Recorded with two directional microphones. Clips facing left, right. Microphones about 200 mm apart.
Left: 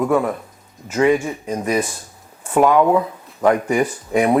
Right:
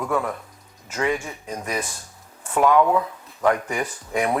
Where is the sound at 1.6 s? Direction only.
10° left (ahead or behind).